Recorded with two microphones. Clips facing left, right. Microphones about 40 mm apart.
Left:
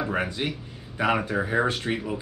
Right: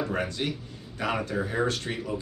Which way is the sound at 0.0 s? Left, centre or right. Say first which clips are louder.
Left 2 dB; centre.